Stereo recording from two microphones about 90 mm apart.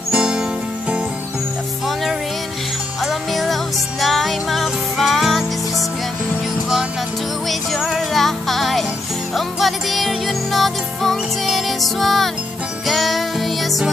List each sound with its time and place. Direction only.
0.1 s music: 10° right (ahead or behind)
3.0 s music: centre (ahead or behind)
7.4 s music: centre (ahead or behind)